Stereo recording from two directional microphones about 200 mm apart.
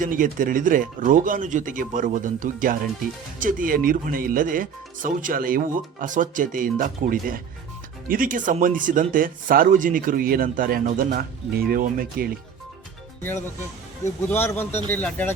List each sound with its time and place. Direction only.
0.0 s speech: 40° right (ahead or behind)
14.3 s speech: 10° left (ahead or behind)